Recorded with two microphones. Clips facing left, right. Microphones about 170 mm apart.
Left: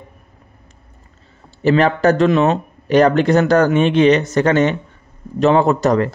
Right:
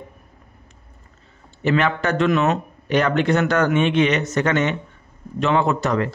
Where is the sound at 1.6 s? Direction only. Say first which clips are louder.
Left 6 dB; 35° left (ahead or behind).